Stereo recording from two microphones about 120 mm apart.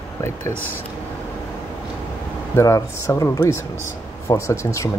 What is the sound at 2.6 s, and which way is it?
Speech, 25° left (ahead or behind).